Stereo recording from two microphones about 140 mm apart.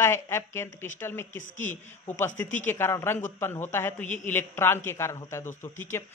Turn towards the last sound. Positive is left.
turn(degrees=20)  # may be behind; listen again after turning